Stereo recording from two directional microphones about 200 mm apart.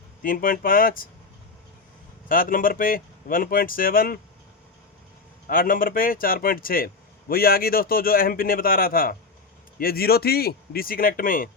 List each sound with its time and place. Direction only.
0.2 s speech: 45° left (ahead or behind)
2.3 s speech: 45° left (ahead or behind)
5.5 s speech: 45° left (ahead or behind)